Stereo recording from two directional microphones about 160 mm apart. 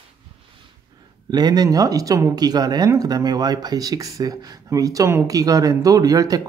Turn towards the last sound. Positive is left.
turn(degrees=-20)  # may be behind; listen again after turning